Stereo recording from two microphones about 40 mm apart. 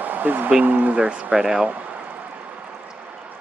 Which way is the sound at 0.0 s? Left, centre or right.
Right.